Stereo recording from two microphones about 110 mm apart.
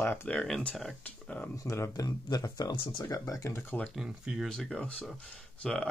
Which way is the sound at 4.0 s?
10° right (ahead or behind).